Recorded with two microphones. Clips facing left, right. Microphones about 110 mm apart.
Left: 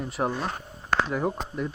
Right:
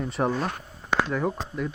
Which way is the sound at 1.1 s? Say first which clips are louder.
Even; 15° left (ahead or behind).